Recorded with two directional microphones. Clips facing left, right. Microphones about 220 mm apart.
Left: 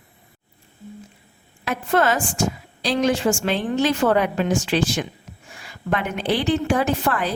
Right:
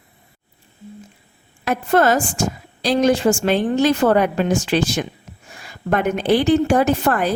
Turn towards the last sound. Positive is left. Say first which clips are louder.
# right 4 dB
turn(degrees=-45)  # may be behind; listen again after turning